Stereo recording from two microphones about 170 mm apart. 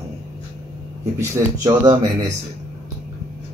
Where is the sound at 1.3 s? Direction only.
20° right (ahead or behind).